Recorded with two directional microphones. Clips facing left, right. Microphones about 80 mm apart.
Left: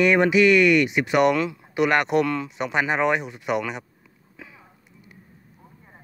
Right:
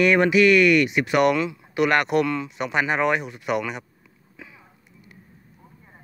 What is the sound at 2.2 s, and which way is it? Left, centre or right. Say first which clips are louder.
Speech: even; left.